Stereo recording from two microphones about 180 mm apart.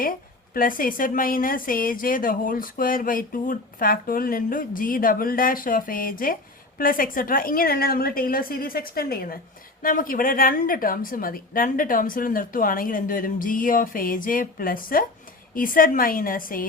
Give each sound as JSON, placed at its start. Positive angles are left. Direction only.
{"t": 0.5, "sound": "a woman's voice", "side_deg": 50}